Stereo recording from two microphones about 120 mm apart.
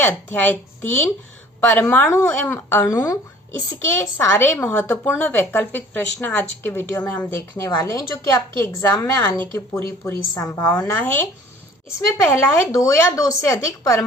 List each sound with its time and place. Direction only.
0.0 s a woman's voice: 15° left (ahead or behind)
7.7 s a woman's voice: 30° left (ahead or behind)